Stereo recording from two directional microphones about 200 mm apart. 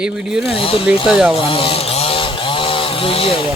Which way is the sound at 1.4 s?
25° left (ahead or behind).